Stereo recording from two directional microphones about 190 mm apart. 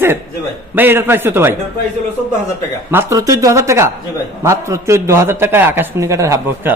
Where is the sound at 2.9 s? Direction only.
15° right (ahead or behind).